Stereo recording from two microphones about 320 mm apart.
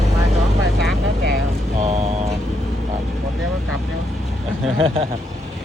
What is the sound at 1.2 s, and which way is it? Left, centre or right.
Vehicle, right.